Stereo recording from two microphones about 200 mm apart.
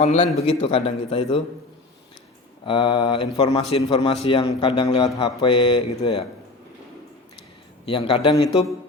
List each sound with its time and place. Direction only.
0.0 s a man's voice: 35° left (ahead or behind)
2.6 s a man's voice: 25° left (ahead or behind)
7.9 s a man's voice: 25° left (ahead or behind)